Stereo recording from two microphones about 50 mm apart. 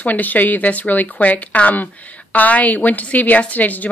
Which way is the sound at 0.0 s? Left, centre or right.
Left.